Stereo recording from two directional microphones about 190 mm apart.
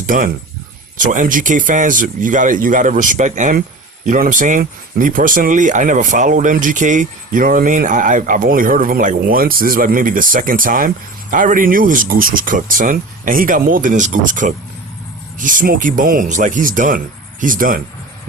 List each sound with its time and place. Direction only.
0.1 s speech: 45° right (ahead or behind)